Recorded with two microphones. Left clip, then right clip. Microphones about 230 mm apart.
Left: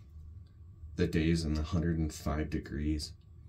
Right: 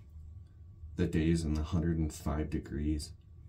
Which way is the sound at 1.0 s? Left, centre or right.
Centre.